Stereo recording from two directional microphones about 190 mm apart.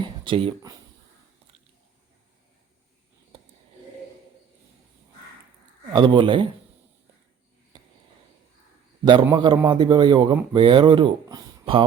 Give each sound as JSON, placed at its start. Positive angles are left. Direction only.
{"t": 0.0, "sound": "speech", "side_deg": -25}
{"t": 5.9, "sound": "a man's voice", "side_deg": -25}
{"t": 9.2, "sound": "a man's voice", "side_deg": -20}